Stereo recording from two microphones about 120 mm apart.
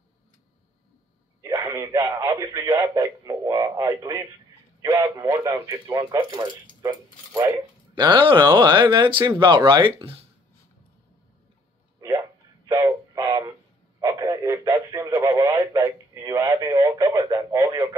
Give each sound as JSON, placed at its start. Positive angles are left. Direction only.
{"t": 1.4, "sound": "speech", "side_deg": -25}
{"t": 7.9, "sound": "speech", "side_deg": -45}
{"t": 13.1, "sound": "a sound", "side_deg": -30}
{"t": 15.0, "sound": "speech", "side_deg": -25}